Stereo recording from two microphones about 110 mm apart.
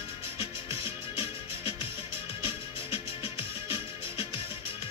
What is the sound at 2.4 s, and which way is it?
Music, 55° left (ahead or behind).